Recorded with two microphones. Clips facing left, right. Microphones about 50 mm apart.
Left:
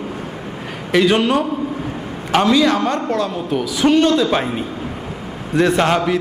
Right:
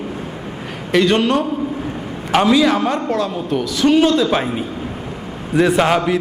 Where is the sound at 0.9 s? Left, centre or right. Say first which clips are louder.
Even; centre.